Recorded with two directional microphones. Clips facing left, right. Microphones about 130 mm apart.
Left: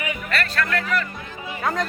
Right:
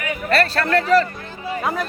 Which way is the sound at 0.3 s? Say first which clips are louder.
Right 8 dB; 35° right (ahead or behind).